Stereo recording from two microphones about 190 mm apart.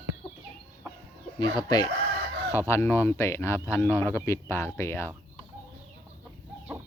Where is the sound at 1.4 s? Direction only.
20° left (ahead or behind).